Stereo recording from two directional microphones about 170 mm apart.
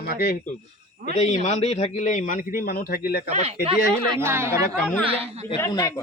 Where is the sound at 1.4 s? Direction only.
40° left (ahead or behind); by 3.1 s 60° left (ahead or behind).